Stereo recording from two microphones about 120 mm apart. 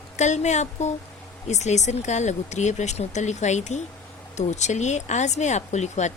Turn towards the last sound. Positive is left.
turn(degrees=75)  # may be behind; listen again after turning